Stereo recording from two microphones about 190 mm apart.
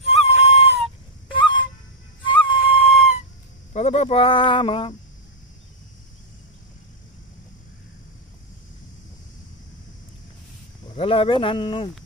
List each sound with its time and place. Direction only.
0.0 s a sound: 35° left (ahead or behind)
1.3 s honk: 25° left (ahead or behind)
2.4 s music: 30° left (ahead or behind)
3.7 s speech: 35° left (ahead or behind)
10.9 s speech: 30° left (ahead or behind)